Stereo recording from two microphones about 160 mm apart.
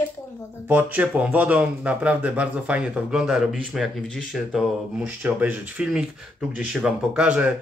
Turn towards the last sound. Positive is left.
turn(degrees=-10)  # may be behind; listen again after turning